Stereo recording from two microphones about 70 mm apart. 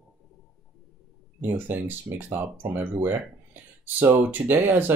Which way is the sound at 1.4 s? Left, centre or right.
Right.